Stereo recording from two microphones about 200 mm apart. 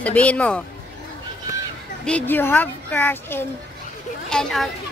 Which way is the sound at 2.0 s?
10° left (ahead or behind).